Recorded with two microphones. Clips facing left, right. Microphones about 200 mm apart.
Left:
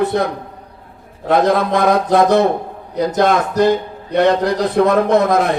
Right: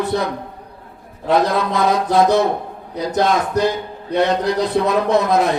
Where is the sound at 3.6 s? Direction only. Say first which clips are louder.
Left 5 dB; 55° left (ahead or behind).